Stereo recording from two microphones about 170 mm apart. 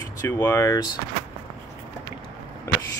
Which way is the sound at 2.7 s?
15° left (ahead or behind).